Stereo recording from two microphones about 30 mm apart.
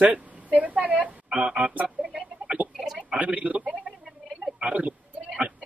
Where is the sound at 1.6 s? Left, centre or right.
Right.